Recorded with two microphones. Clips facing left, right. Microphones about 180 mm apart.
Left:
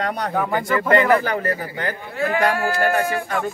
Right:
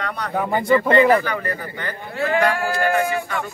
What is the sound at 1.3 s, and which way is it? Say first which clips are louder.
Speech: left 3 dB; 40° left (ahead or behind).